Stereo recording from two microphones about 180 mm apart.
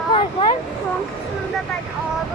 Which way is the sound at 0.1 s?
30° left (ahead or behind).